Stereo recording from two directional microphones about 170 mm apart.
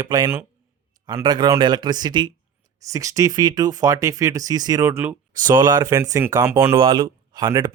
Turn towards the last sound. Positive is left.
turn(degrees=-25)  # may be behind; listen again after turning